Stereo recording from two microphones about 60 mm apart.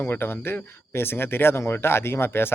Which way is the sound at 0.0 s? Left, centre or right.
Left.